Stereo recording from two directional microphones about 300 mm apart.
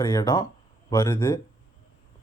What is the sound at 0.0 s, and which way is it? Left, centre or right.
Speech, centre.